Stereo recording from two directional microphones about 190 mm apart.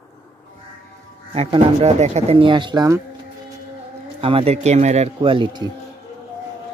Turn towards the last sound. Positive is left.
turn(degrees=-25)  # may be behind; listen again after turning